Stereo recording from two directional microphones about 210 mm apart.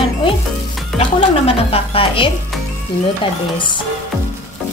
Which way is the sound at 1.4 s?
25° left (ahead or behind).